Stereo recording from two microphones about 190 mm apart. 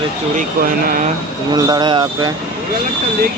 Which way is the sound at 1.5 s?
20° right (ahead or behind).